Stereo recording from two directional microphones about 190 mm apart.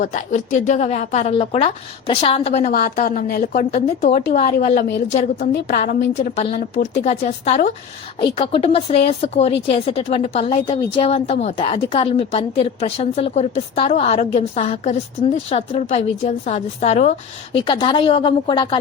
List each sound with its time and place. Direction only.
0.0 s a woman's voice: 40° left (ahead or behind)
2.7 s a woman's voice: 50° left (ahead or behind)
6.1 s a woman's voice: 35° left (ahead or behind)